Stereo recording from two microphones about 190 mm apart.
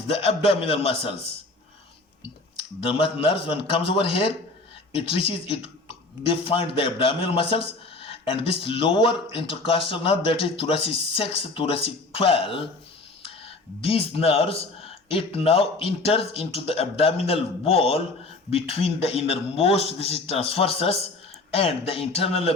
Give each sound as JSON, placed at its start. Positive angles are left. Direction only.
{"t": 0.1, "sound": "speech", "side_deg": 30}
{"t": 13.8, "sound": "speech", "side_deg": 30}